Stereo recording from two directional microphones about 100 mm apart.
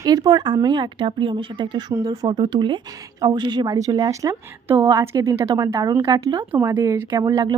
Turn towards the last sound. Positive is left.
turn(degrees=-45)  # may be behind; listen again after turning